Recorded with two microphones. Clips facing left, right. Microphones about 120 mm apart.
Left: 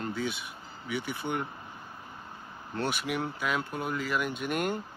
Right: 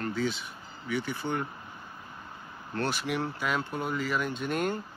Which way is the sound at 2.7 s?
10° left (ahead or behind).